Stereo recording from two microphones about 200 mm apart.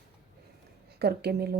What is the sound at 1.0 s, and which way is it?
Speech, 55° right (ahead or behind).